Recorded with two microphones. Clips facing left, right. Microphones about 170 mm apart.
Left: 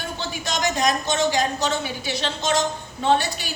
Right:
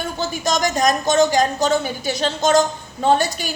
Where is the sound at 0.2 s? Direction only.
40° right (ahead or behind).